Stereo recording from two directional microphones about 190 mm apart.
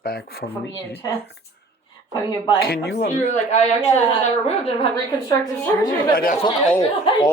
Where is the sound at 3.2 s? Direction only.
35° left (ahead or behind).